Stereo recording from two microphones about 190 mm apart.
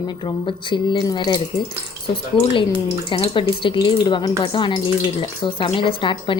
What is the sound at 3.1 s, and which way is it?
Speech, 25° left (ahead or behind).